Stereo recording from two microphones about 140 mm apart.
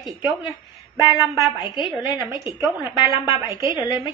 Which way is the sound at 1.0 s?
20° right (ahead or behind).